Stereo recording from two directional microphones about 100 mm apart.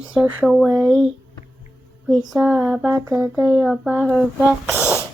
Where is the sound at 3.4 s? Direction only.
25° right (ahead or behind).